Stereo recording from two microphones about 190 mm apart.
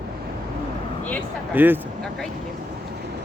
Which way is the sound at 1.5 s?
10° right (ahead or behind).